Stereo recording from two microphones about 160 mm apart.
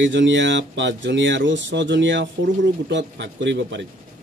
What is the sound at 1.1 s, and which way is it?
Speech, 90° right.